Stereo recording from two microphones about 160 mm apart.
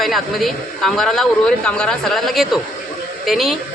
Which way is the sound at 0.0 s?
Centre (ahead or behind).